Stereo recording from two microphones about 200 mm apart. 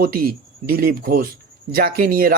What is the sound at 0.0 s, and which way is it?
Speech, 45° right (ahead or behind).